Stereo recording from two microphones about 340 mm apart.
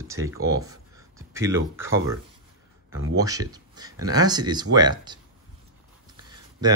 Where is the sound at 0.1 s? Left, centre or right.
Centre.